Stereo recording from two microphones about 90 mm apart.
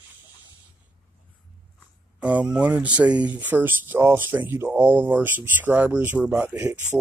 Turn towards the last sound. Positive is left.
turn(degrees=-20)  # may be behind; listen again after turning